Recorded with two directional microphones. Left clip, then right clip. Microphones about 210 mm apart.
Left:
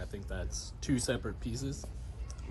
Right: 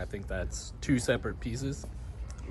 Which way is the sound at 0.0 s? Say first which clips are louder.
Right 6 dB; 10° left (ahead or behind).